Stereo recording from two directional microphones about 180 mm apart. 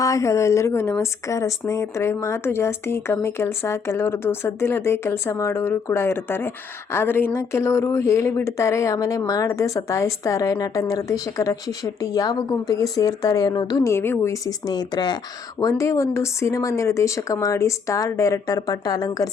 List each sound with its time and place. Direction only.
0.0 s a woman's voice: 15° left (ahead or behind)